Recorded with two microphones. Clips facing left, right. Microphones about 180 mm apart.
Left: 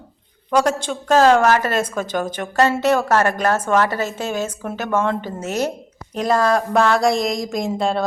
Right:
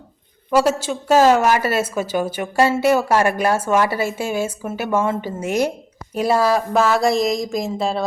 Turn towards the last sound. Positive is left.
turn(degrees=0)  # may be behind; listen again after turning